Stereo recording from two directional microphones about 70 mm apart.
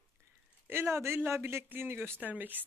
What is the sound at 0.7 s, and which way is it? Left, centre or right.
Speech, right.